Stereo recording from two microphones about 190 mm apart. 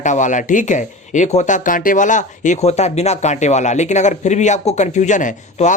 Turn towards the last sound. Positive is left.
turn(degrees=40)  # may be behind; listen again after turning